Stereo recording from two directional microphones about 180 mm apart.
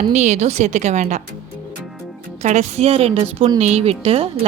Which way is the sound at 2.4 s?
40° right (ahead or behind).